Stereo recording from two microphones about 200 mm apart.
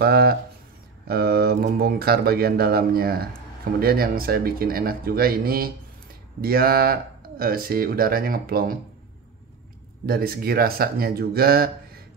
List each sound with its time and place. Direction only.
0.0 s speech: 50° right (ahead or behind)
10.0 s speech: 50° right (ahead or behind)